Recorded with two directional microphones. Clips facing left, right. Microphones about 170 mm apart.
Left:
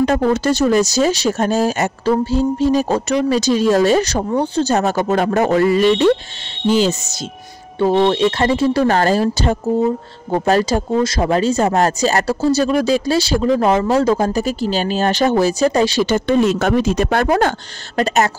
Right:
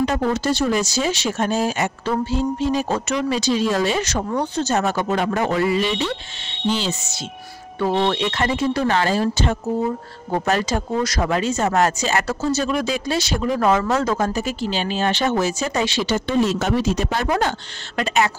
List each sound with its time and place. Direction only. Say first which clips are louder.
0.0 s speech: left 5 dB; 55° left (ahead or behind)
7.8 s speech: left 6 dB; 25° left (ahead or behind)
16.1 s speech: left 5 dB; 55° left (ahead or behind); by 18.3 s 40° left (ahead or behind)